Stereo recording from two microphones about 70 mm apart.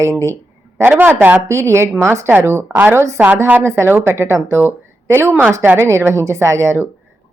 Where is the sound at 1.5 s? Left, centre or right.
Right.